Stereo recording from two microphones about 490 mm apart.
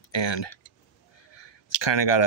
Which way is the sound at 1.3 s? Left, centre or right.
Left.